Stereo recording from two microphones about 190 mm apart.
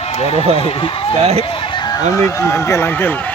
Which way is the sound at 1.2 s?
30° right (ahead or behind).